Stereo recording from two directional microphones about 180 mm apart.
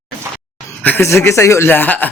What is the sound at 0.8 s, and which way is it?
Speech, 10° left (ahead or behind).